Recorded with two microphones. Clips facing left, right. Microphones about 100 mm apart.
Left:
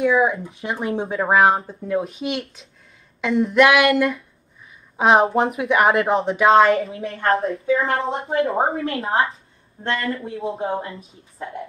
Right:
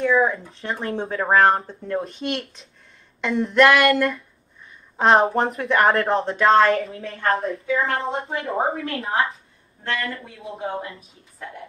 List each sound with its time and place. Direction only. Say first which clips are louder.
0.0 s speech: left 1 dB; 5° left (ahead or behind)
7.1 s speech: left 2 dB; 30° left (ahead or behind)
8.0 s speech: left 2 dB; centre (ahead or behind)
8.3 s speech: left 6 dB; 30° left (ahead or behind)